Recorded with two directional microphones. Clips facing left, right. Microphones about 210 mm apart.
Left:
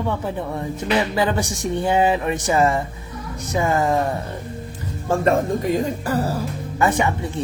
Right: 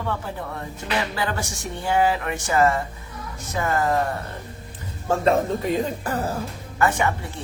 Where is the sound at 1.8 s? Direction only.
20° left (ahead or behind).